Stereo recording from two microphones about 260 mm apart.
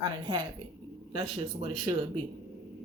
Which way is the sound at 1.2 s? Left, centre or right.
Centre.